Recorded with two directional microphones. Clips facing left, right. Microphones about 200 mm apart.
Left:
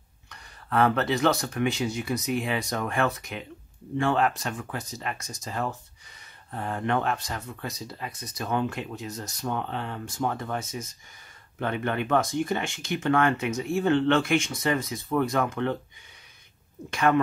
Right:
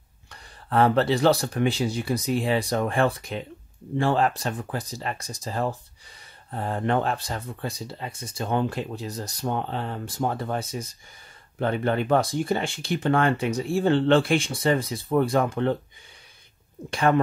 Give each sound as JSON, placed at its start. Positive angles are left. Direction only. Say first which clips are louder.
{"t": 0.3, "sound": "speech", "louder": "right 2 dB", "side_deg": -30}
{"t": 16.9, "sound": "speech", "louder": "right 1 dB", "side_deg": -30}